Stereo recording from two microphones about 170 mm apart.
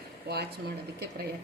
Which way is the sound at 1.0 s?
75° right (ahead or behind).